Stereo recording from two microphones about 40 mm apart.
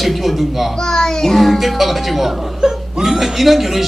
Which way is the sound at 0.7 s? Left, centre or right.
Centre.